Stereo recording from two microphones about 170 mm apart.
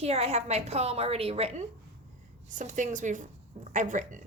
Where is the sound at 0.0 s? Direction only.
35° right (ahead or behind).